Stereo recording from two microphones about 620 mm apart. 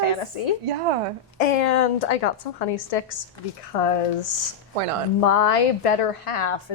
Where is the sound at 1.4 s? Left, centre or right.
Left.